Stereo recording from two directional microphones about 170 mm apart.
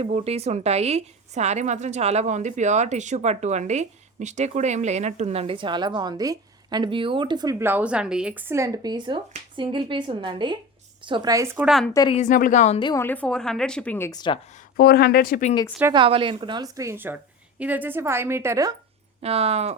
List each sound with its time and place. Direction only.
0.0 s a woman's voice: 35° right (ahead or behind)
7.6 s a woman's voice: 10° right (ahead or behind)
12.1 s a woman's voice: 50° left (ahead or behind)
12.8 s a woman's voice: 20° left (ahead or behind)
13.1 s a woman's voice: 5° left (ahead or behind)
14.1 s a woman's voice: 25° left (ahead or behind)
14.8 s speech: 70° left (ahead or behind); by 15.5 s 50° left (ahead or behind)
15.9 s a woman's voice: 30° right (ahead or behind)
19.2 s a woman's voice: 35° right (ahead or behind)